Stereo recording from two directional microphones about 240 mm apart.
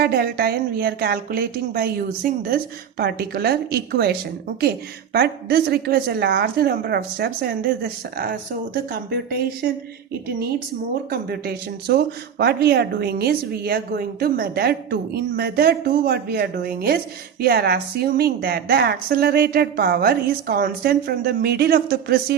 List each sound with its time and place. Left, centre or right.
0.0 s speech: right
11.1 s speech: right